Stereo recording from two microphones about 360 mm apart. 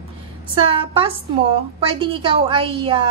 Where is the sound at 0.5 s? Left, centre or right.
Centre.